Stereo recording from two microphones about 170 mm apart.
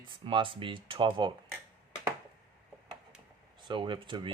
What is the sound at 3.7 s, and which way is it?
Speech, 30° right (ahead or behind).